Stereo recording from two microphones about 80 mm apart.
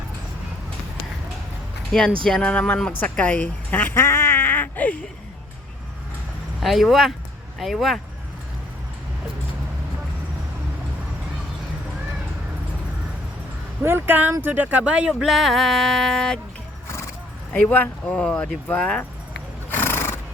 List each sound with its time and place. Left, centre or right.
1.9 s speech: centre
6.6 s a sound: centre
13.8 s speech: right
15.2 s a sound: centre
17.5 s speech: centre
19.7 s neigh: left